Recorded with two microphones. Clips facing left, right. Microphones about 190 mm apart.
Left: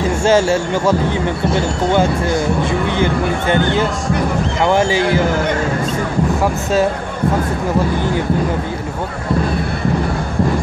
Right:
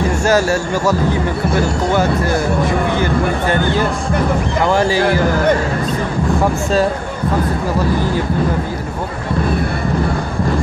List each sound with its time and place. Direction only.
0.2 s speech: 25° left (ahead or behind)
4.6 s speech: 20° left (ahead or behind)